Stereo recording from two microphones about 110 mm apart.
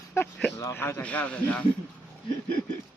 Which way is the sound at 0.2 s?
25° left (ahead or behind).